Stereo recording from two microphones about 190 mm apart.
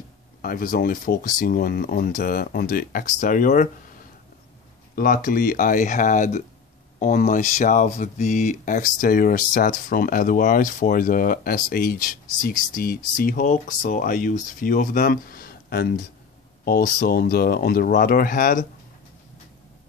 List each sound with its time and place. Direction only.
0.4 s speech: 50° left (ahead or behind)
4.9 s speech: 50° left (ahead or behind)